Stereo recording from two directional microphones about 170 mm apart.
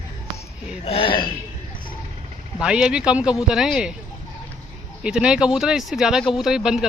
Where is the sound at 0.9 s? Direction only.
30° left (ahead or behind).